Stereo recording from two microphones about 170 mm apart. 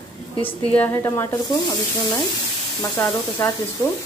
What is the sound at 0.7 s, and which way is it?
Speech, 10° left (ahead or behind).